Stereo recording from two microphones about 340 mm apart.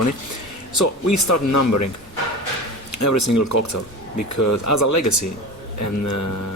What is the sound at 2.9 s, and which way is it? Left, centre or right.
Speech, left.